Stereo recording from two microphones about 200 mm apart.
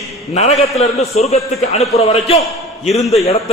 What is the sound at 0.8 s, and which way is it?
A man's voice, 30° left (ahead or behind).